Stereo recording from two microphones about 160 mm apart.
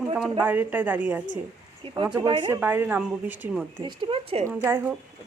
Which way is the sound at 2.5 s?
15° right (ahead or behind).